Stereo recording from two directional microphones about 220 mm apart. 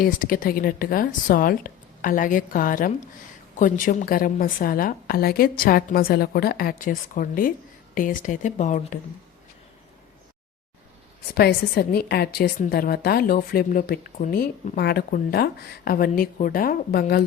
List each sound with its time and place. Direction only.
0.0 s a woman's voice: 40° left (ahead or behind)
11.3 s a woman's voice: 45° left (ahead or behind)